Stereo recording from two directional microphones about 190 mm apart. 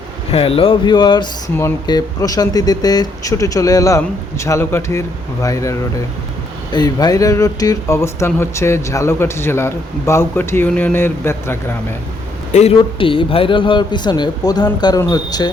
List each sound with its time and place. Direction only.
0.3 s a man's voice: 30° left (ahead or behind); by 11.9 s 10° left (ahead or behind)
12.5 s a man's voice: 30° left (ahead or behind)